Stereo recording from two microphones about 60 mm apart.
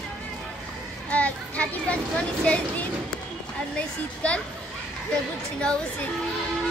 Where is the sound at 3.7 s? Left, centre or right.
Left.